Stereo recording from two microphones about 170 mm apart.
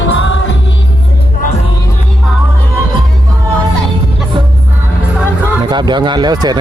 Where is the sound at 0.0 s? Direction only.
90° left.